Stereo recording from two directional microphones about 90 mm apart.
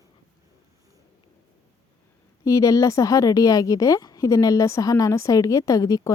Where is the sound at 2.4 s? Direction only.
35° left (ahead or behind).